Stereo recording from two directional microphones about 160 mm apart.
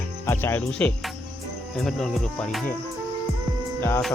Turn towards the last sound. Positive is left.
turn(degrees=15)  # may be behind; listen again after turning